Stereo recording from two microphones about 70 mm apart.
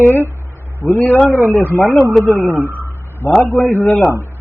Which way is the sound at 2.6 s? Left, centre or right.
Right.